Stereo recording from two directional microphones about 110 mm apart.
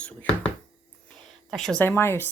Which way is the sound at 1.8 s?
20° left (ahead or behind).